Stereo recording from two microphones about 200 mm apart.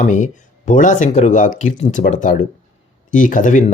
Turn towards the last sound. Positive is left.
turn(degrees=40)  # may be behind; listen again after turning